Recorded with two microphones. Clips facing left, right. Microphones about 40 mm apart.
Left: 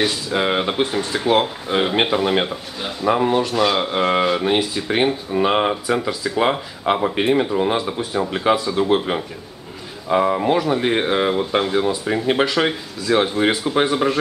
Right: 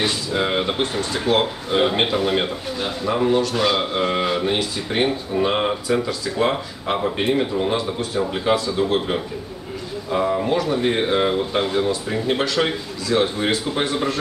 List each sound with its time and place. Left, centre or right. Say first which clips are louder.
0.3 s speech: left 2 dB; centre
3.5 s speech: left 2 dB; centre
3.9 s speech: left 3 dB; centre
10.0 s speech: left 4 dB; left